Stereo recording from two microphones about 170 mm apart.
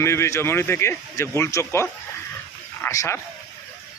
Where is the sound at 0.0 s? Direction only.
15° left (ahead or behind).